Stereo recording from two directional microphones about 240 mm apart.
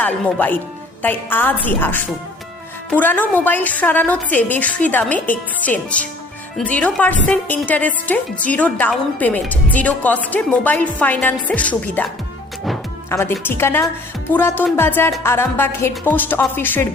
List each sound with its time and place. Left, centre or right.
0.0 s a woman's voice: centre
13.1 s a woman's voice: centre